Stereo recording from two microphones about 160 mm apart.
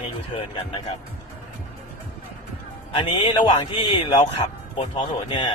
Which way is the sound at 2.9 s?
30° left (ahead or behind).